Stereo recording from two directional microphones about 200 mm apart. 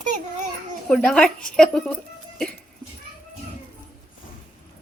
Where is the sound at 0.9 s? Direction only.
5° left (ahead or behind).